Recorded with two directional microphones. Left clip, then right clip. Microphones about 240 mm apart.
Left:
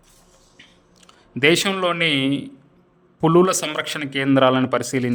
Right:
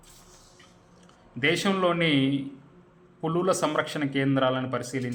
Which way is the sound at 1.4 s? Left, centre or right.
Left.